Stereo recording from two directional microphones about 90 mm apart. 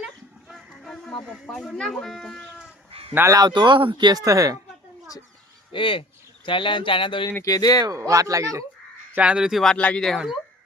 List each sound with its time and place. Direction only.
0.5 s speech: 5° left (ahead or behind)
2.9 s honk: 90° right
3.2 s speech: 40° right (ahead or behind)
3.5 s speech: 60° right (ahead or behind)
4.2 s speech: 35° right (ahead or behind)
5.7 s speech: 75° left (ahead or behind)
7.4 s speech: 45° left (ahead or behind)
7.9 s speech: 40° right (ahead or behind)
9.1 s speech: 15° right (ahead or behind)
9.7 s speech: 10° left (ahead or behind)